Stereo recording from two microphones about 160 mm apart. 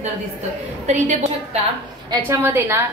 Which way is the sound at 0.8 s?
50° right (ahead or behind).